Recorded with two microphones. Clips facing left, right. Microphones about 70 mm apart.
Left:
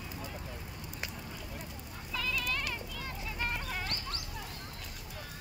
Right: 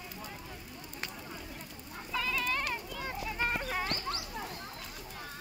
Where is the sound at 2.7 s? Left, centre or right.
Right.